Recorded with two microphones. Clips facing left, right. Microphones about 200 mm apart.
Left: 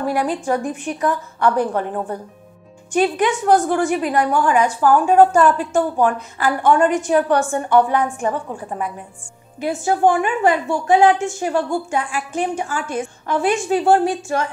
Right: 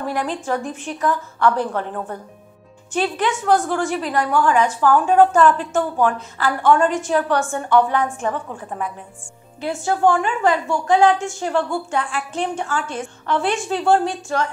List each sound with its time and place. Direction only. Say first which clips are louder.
0.0 s a woman's voice: left 4 dB; 10° left (ahead or behind)